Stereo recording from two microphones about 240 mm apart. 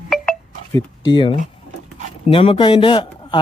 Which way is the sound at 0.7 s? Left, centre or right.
Centre.